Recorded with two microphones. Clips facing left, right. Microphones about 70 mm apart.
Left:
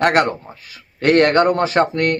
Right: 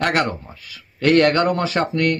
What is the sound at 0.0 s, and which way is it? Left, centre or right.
A man's voice, left.